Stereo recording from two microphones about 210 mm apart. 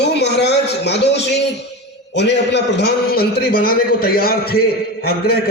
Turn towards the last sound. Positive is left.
turn(degrees=45)  # may be behind; listen again after turning